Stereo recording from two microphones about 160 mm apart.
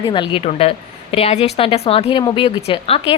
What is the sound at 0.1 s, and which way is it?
A woman's voice, 30° left (ahead or behind).